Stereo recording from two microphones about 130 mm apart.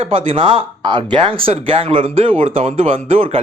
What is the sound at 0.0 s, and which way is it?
Speech, 45° right (ahead or behind).